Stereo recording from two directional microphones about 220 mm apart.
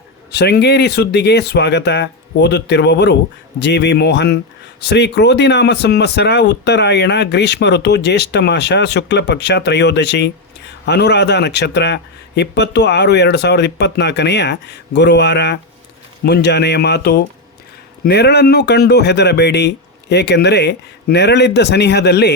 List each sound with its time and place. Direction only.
0.3 s speech: 50° left (ahead or behind)